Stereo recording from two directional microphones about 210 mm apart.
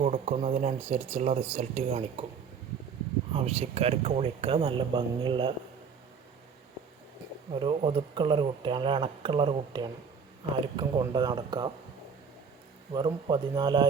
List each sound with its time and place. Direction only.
0.0 s speech: 30° right (ahead or behind)
3.3 s speech: 30° right (ahead or behind)
7.5 s speech: 25° right (ahead or behind)
11.0 s speech: 20° right (ahead or behind)
12.9 s speech: 20° right (ahead or behind)